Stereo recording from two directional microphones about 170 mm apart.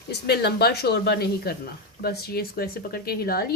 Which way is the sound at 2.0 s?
65° left (ahead or behind).